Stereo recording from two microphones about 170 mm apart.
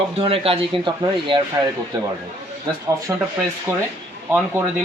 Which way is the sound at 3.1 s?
15° right (ahead or behind).